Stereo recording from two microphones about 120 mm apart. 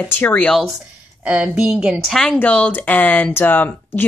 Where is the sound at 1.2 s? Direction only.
10° right (ahead or behind); by 4.0 s 15° left (ahead or behind).